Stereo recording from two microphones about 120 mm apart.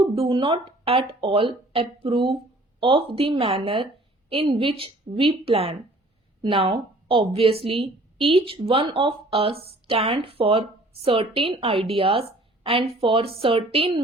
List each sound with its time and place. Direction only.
0.0 s a woman's voice: 45° right (ahead or behind)